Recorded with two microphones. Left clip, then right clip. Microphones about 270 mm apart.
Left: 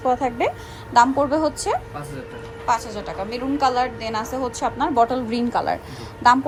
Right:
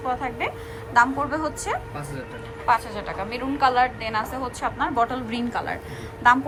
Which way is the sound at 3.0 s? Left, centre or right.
Centre.